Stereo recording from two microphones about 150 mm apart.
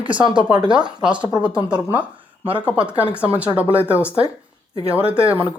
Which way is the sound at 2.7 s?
10° right (ahead or behind).